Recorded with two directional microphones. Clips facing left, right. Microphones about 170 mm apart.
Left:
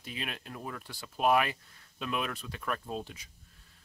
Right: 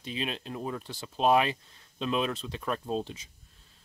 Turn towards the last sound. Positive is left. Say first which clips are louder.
# right 6 dB
turn(degrees=-25)  # may be behind; listen again after turning